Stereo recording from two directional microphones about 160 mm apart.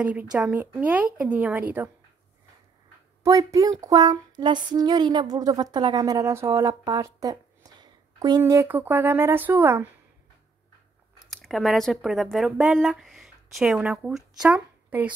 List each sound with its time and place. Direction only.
0.0 s speech: 10° right (ahead or behind)
3.3 s a sound: 20° right (ahead or behind)
11.2 s speech: centre (ahead or behind)